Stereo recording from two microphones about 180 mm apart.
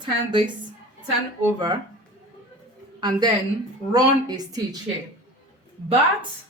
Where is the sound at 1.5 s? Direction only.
25° right (ahead or behind).